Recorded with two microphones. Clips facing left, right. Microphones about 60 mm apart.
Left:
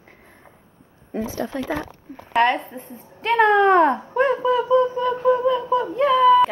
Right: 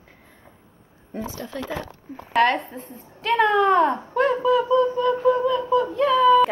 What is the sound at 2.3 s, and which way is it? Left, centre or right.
Speech, centre.